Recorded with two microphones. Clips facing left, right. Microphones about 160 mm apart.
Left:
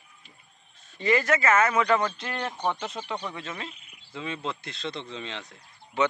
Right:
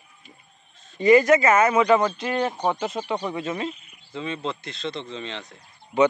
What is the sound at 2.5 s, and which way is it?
Speech, 40° right (ahead or behind).